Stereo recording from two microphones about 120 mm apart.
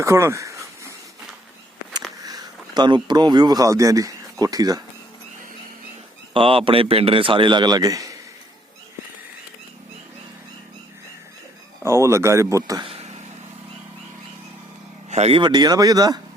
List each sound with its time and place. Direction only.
0.0 s speech: 25° right (ahead or behind)
2.0 s speech: 30° right (ahead or behind)
6.3 s a man's voice: 50° right (ahead or behind); by 8.1 s 30° right (ahead or behind)
11.8 s speech: 25° right (ahead or behind)
15.1 s speech: 65° right (ahead or behind)
15.4 s speech: 35° right (ahead or behind)